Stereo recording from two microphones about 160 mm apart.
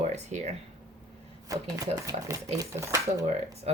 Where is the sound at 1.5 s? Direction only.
20° right (ahead or behind).